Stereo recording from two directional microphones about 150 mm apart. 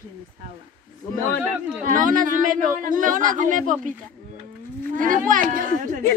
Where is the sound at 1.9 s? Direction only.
60° right (ahead or behind).